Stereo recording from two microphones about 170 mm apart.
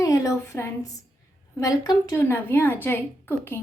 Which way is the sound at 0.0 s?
20° left (ahead or behind).